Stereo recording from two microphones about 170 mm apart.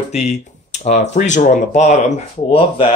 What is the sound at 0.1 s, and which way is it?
Speech, 40° left (ahead or behind).